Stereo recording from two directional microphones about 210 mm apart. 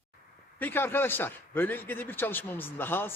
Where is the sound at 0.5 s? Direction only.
10° left (ahead or behind).